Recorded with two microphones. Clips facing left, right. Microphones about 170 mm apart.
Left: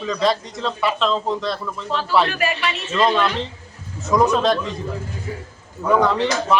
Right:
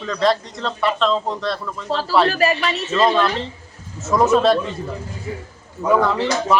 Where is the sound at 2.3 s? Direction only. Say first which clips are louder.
Right 4 dB; 35° right (ahead or behind).